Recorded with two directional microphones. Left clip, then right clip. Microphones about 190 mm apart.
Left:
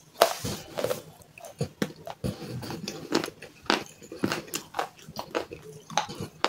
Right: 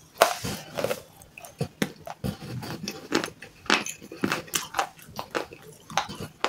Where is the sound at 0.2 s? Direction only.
10° right (ahead or behind).